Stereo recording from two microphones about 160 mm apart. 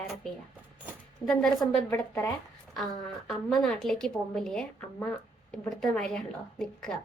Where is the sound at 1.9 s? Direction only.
15° left (ahead or behind).